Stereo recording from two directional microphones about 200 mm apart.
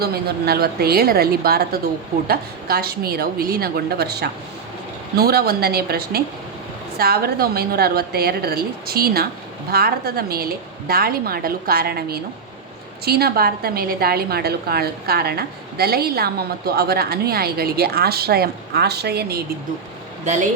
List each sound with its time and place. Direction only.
0.0 s a woman's voice: 50° right (ahead or behind)
20.2 s speech: 35° right (ahead or behind)